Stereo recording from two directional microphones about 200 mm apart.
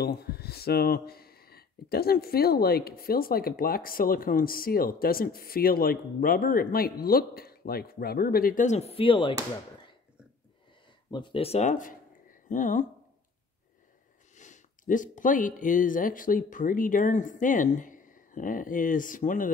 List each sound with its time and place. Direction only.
0.0 s speech: 50° left (ahead or behind); by 9.3 s 25° left (ahead or behind)
11.1 s speech: 25° left (ahead or behind); by 12.8 s 40° left (ahead or behind)
14.3 s speech: 40° left (ahead or behind)